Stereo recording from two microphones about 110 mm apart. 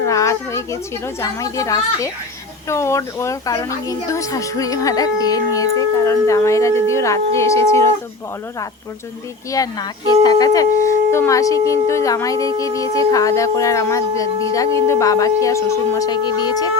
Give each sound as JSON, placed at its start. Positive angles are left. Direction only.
{"t": 0.0, "sound": "a woman's voice", "side_deg": 30}
{"t": 9.5, "sound": "a woman's voice", "side_deg": 35}
{"t": 16.0, "sound": "speech", "side_deg": 40}